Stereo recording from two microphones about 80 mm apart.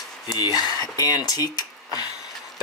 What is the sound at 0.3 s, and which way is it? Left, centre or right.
Speech, left.